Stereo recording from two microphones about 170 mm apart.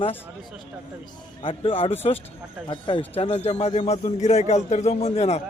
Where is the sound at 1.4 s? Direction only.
30° left (ahead or behind).